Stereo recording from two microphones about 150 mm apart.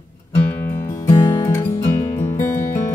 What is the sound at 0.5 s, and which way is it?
Music, 15° left (ahead or behind).